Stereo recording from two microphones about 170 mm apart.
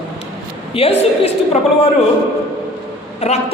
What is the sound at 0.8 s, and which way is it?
Speech, 35° left (ahead or behind).